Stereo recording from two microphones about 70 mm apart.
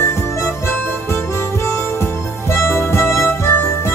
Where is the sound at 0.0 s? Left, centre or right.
Left.